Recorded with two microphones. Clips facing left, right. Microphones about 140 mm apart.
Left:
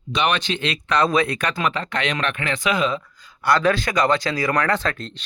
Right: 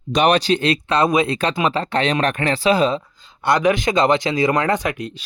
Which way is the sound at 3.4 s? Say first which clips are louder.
Right 2 dB; 20° right (ahead or behind).